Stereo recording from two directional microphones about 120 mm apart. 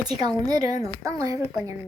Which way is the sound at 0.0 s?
35° right (ahead or behind).